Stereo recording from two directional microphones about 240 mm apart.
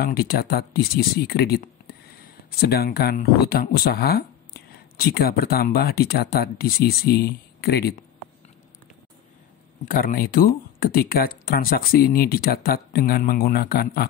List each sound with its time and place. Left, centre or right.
0.0 s speech: left
9.8 s speech: left